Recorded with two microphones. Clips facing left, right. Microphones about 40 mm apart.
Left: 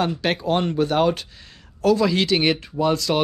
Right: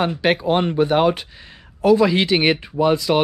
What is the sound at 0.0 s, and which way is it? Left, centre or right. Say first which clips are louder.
Speech: right 4 dB; right.